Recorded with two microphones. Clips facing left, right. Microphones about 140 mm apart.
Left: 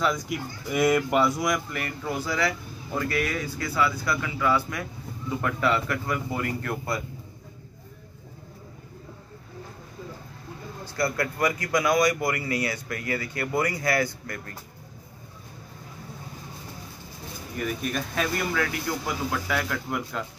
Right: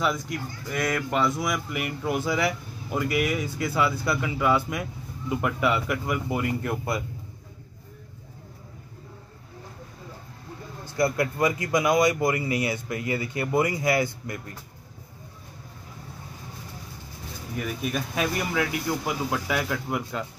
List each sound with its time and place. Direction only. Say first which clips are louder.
0.3 s speech: left 2 dB; 10° left (ahead or behind); by 7.0 s 15° right (ahead or behind)
11.0 s speech: right 3 dB; 20° right (ahead or behind)
17.6 s speech: even; 5° right (ahead or behind)